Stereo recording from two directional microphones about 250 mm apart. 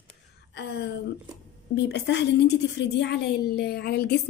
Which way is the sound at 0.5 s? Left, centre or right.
Left.